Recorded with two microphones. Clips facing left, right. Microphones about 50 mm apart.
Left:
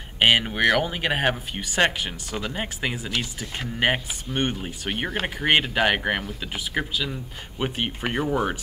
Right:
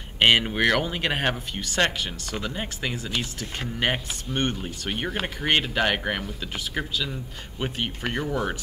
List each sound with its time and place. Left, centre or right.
0.2 s speech: centre; by 8.5 s left